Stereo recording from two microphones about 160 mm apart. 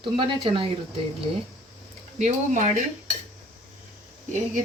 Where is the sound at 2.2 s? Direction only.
45° right (ahead or behind).